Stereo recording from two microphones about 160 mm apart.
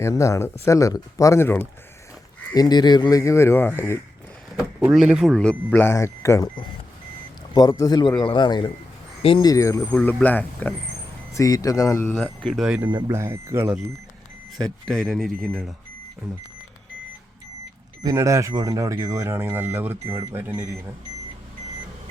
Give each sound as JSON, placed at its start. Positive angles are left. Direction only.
{"t": 0.0, "sound": "speech", "side_deg": 20}
{"t": 2.6, "sound": "speech", "side_deg": 25}
{"t": 4.8, "sound": "speech", "side_deg": -5}
{"t": 7.5, "sound": "speech", "side_deg": 25}
{"t": 11.3, "sound": "speech", "side_deg": 20}
{"t": 12.2, "sound": "speech", "side_deg": 0}
{"t": 14.6, "sound": "speech", "side_deg": 5}
{"t": 18.0, "sound": "speech", "side_deg": -20}